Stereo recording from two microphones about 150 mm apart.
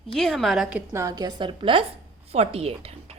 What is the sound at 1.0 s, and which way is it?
A woman's voice, 25° right (ahead or behind).